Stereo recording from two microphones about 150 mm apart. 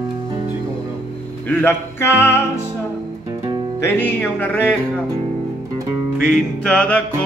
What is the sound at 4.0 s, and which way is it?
Music, 15° left (ahead or behind).